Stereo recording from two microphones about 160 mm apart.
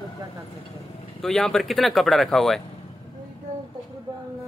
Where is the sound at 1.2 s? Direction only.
5° left (ahead or behind).